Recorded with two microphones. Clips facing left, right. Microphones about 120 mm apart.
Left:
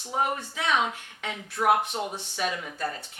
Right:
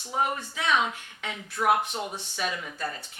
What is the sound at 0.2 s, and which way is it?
Speech, 45° left (ahead or behind).